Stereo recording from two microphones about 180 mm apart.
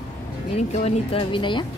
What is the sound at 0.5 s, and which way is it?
Speech, 35° left (ahead or behind).